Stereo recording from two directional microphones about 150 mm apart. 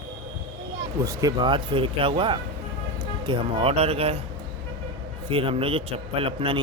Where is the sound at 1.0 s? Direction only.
25° right (ahead or behind).